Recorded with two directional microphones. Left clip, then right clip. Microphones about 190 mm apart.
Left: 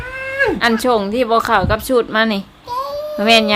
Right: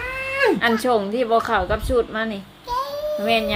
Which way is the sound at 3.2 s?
35° left (ahead or behind).